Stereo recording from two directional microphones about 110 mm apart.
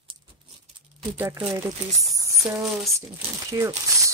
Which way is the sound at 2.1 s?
30° right (ahead or behind).